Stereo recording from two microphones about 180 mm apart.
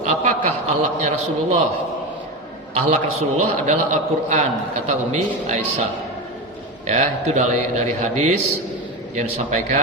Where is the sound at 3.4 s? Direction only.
40° right (ahead or behind).